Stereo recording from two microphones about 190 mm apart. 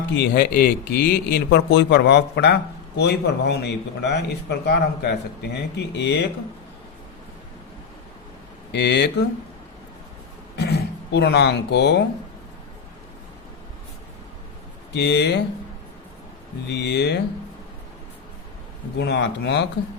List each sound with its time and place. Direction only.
0.1 s speech: 55° left (ahead or behind)
8.7 s speech: 60° left (ahead or behind)
10.6 s speech: 60° left (ahead or behind)
14.9 s speech: 65° left (ahead or behind)
16.6 s speech: 60° left (ahead or behind)
18.9 s speech: 65° left (ahead or behind)